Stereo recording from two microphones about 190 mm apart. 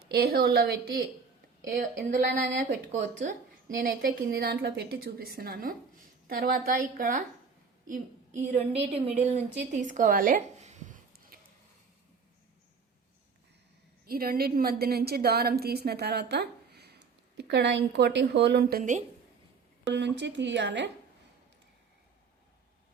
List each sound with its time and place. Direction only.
0.1 s a woman's voice: 55° right (ahead or behind)
3.8 s a woman's voice: 45° right (ahead or behind)
14.1 s a woman's voice: 50° right (ahead or behind)
18.8 s a woman's voice: 40° right (ahead or behind)
19.9 s a woman's voice: 65° right (ahead or behind)